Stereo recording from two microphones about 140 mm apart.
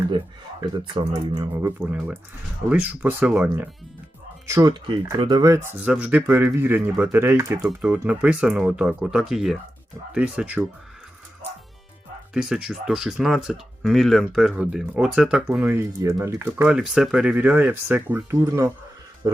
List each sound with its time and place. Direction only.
0.9 s speech: 30° right (ahead or behind)
1.6 s speech: 10° right (ahead or behind)
4.4 s speech: 20° right (ahead or behind)
4.7 s speech: 35° right (ahead or behind)
5.8 s speech: 10° right (ahead or behind)
12.3 s speech: 5° right (ahead or behind)
16.6 s speech: 5° right (ahead or behind); by 18.7 s 20° right (ahead or behind)